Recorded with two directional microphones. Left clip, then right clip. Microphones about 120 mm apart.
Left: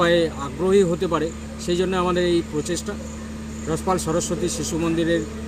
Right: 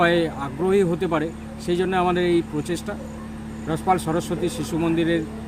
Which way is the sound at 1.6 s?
35° right (ahead or behind).